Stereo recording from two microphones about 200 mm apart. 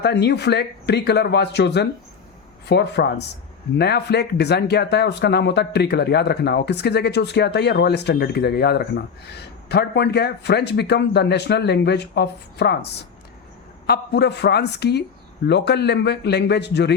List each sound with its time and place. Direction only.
0.0 s speech: 55° left (ahead or behind)